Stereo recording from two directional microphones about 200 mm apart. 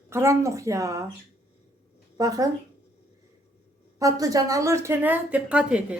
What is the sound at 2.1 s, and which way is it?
Speech, 15° right (ahead or behind).